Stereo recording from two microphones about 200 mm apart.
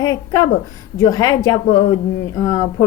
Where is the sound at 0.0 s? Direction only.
20° left (ahead or behind).